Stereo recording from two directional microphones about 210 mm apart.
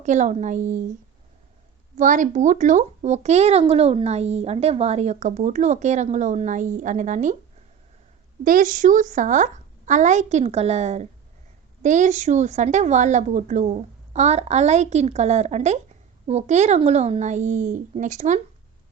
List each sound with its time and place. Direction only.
0.0 s speech: 35° right (ahead or behind)
2.0 s speech: 40° right (ahead or behind)
8.4 s speech: 40° right (ahead or behind)